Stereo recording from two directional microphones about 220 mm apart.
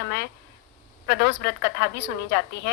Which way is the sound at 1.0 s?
50° left (ahead or behind).